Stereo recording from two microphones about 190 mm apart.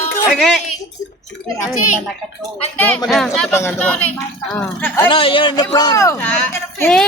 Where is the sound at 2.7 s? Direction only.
10° left (ahead or behind).